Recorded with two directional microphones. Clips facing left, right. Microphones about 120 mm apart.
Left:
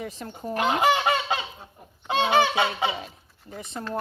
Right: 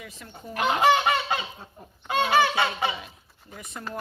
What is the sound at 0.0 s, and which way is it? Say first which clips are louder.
Speech: left 8 dB; 40° left (ahead or behind).